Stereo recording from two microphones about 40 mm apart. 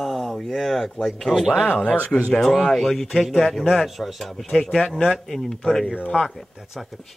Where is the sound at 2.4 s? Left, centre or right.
Centre.